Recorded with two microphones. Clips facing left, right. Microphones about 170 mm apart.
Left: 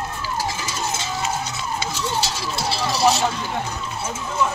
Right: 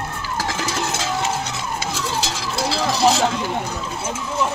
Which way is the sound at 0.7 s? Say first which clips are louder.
Right 3 dB; 90° right.